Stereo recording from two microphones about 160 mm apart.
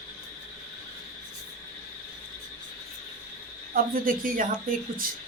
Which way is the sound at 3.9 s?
60° right (ahead or behind).